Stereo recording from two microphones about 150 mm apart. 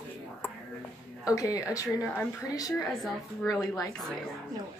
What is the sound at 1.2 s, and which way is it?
Speech, 25° left (ahead or behind).